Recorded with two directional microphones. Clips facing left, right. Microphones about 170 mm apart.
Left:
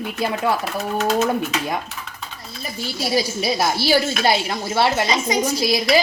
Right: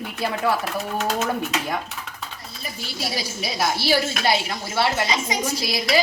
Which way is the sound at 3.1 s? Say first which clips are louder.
Left 12 dB; 35° left (ahead or behind).